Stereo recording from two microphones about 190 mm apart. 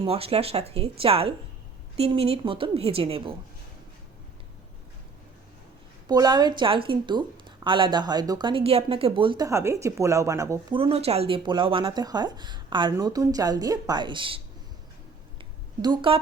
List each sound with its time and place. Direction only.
0.0 s a woman's voice: 30° right (ahead or behind)
6.1 s speech: 20° right (ahead or behind)
9.5 s speech: 15° right (ahead or behind)
10.8 s speech: 30° right (ahead or behind)
15.8 s speech: 25° right (ahead or behind)